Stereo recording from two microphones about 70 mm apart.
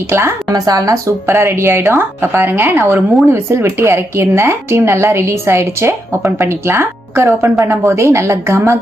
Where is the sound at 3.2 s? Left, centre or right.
Right.